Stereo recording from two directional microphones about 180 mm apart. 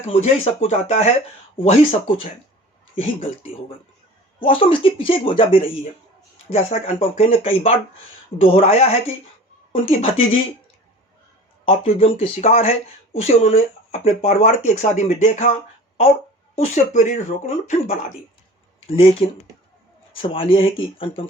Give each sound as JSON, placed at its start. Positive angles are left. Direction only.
{"t": 0.1, "sound": "speech", "side_deg": 40}
{"t": 11.6, "sound": "speech", "side_deg": 35}
{"t": 16.6, "sound": "speech", "side_deg": 45}
{"t": 18.9, "sound": "speech", "side_deg": 35}